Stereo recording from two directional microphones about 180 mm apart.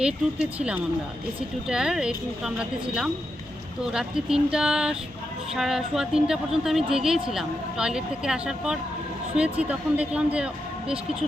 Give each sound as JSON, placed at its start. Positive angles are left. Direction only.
{"t": 0.0, "sound": "speech", "side_deg": -5}
{"t": 3.9, "sound": "speech", "side_deg": -5}